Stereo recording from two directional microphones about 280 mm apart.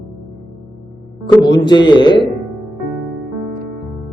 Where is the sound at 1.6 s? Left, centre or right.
Centre.